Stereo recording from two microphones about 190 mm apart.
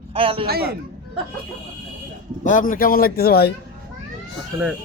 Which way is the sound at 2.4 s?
45° left (ahead or behind).